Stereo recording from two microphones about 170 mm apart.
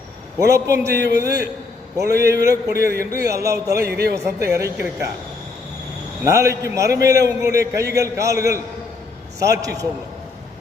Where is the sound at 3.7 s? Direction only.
70° right (ahead or behind).